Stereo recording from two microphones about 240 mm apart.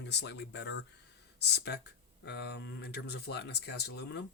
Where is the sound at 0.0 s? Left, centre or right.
Left.